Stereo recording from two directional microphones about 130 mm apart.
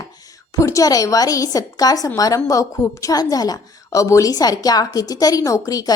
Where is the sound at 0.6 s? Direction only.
25° left (ahead or behind).